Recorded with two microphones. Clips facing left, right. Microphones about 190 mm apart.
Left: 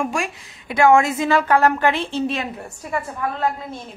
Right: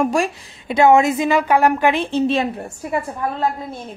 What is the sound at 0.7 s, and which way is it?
A woman's voice, 20° right (ahead or behind).